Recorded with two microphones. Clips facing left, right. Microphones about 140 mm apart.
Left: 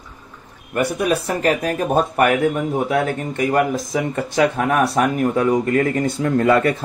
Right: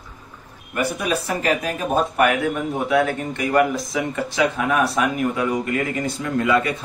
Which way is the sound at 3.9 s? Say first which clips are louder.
Left 2 dB; 45° left (ahead or behind).